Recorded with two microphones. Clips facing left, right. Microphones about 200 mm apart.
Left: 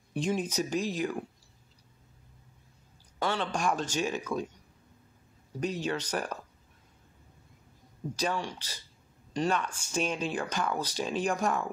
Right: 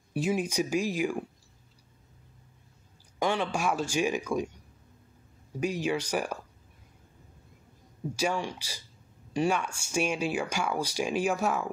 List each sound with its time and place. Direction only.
0.1 s speech: 5° right (ahead or behind)
3.2 s speech: 15° right (ahead or behind)
5.6 s speech: 10° right (ahead or behind)
8.2 s speech: 10° right (ahead or behind)